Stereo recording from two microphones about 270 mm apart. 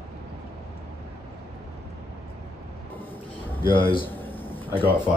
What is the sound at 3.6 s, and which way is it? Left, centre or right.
Speech, centre.